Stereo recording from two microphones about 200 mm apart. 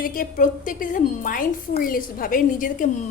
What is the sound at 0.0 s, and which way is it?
A woman's voice, 45° left (ahead or behind).